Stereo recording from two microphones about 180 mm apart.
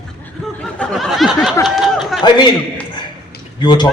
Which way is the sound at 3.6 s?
25° left (ahead or behind).